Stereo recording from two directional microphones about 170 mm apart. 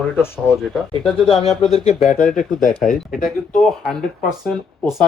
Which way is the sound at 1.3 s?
35° left (ahead or behind).